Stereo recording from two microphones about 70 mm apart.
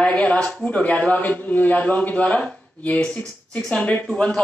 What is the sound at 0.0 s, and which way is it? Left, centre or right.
A man's voice, centre.